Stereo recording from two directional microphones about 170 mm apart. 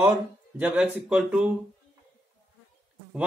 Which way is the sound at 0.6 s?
5° right (ahead or behind).